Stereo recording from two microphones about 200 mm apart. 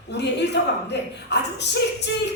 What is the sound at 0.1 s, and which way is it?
A woman's voice, 60° left (ahead or behind).